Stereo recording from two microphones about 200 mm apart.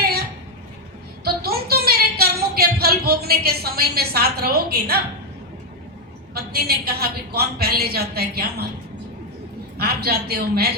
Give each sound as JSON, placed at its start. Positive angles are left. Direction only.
{"t": 1.2, "sound": "a sound", "side_deg": -50}
{"t": 6.3, "sound": "a woman's voice", "side_deg": -50}
{"t": 9.7, "sound": "a woman's voice", "side_deg": -50}